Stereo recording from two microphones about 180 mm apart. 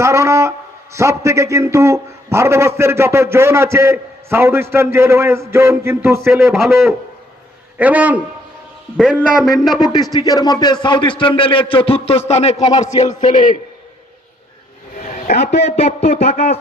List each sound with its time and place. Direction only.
0.0 s a man's voice: 15° right (ahead or behind)
6.5 s a man's voice: centre (ahead or behind)
7.8 s a man's voice: 10° right (ahead or behind)
9.8 s a sound: 20° left (ahead or behind)
12.3 s a man's voice: 35° left (ahead or behind)
15.0 s a man's voice: 40° left (ahead or behind)